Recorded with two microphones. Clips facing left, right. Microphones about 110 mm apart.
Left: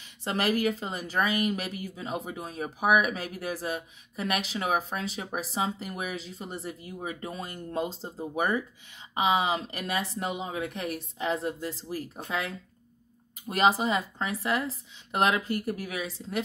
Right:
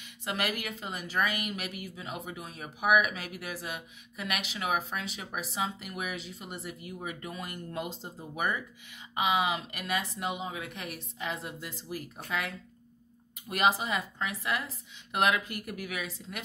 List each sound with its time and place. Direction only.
0.0 s speech: 35° left (ahead or behind)